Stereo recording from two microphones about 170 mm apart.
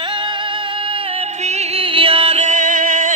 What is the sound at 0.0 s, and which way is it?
Music, 25° right (ahead or behind).